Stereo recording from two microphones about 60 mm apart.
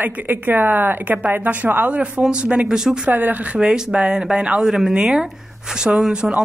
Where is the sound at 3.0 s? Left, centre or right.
Right.